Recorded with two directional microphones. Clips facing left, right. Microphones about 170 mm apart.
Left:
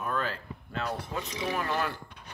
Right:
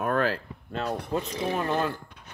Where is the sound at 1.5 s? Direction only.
25° right (ahead or behind).